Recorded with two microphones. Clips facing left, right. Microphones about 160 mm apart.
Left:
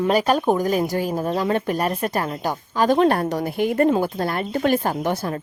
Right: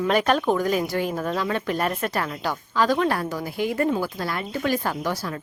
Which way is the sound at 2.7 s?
50° left (ahead or behind).